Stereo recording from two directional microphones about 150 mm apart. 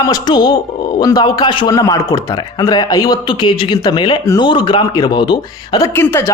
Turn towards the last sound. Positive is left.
turn(degrees=15)  # may be behind; listen again after turning